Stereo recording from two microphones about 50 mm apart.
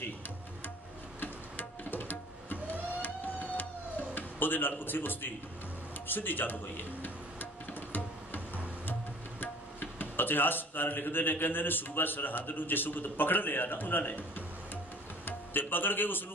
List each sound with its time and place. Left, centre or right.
1.2 s music: left
4.1 s speech: left
6.0 s music: left
9.4 s speech: left
15.2 s speech: left